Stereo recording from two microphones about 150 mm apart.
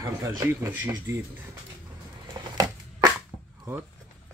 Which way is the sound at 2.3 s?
25° right (ahead or behind).